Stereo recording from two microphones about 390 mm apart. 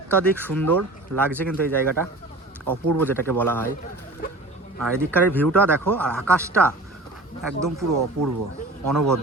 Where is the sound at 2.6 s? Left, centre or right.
Right.